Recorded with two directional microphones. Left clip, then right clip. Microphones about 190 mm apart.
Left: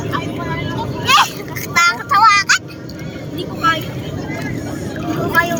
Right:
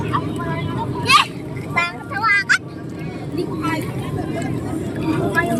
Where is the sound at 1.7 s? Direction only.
65° left (ahead or behind).